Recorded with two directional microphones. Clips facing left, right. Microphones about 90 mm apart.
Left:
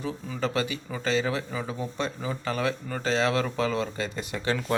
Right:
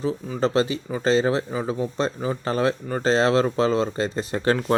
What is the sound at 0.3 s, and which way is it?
Speech, 30° right (ahead or behind).